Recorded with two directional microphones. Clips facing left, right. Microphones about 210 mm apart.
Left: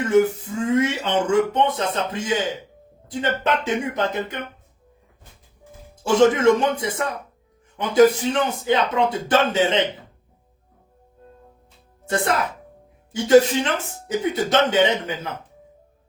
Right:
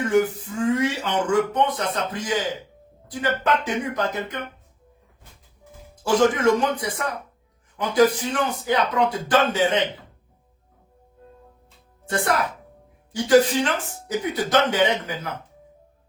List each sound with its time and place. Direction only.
0.1 s speech: 25° left (ahead or behind)
6.0 s speech: 25° left (ahead or behind)
12.0 s speech: 25° left (ahead or behind)